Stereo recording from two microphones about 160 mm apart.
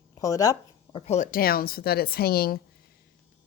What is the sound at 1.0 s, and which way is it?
Speech, 45° left (ahead or behind).